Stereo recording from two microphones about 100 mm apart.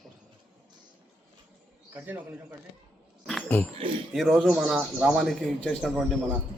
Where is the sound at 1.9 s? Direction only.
20° right (ahead or behind).